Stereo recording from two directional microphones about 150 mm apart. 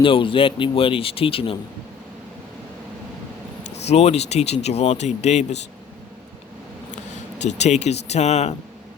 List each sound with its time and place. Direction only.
0.0 s speech: 35° left (ahead or behind)
3.8 s speech: 45° left (ahead or behind)
7.4 s speech: 50° left (ahead or behind)